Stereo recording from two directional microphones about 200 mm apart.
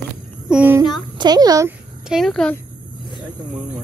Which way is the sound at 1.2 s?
20° right (ahead or behind).